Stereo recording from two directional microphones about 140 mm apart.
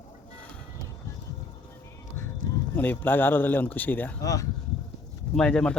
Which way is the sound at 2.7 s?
15° left (ahead or behind).